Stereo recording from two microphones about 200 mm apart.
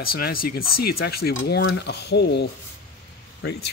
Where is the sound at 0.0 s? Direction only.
50° left (ahead or behind).